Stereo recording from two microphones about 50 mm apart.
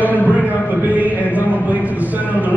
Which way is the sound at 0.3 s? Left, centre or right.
Right.